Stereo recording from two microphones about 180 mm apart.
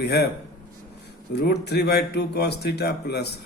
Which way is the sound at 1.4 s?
65° left (ahead or behind).